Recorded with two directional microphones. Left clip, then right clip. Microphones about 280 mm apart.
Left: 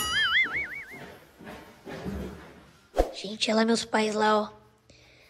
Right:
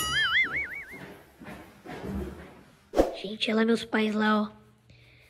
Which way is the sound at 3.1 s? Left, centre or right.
Centre.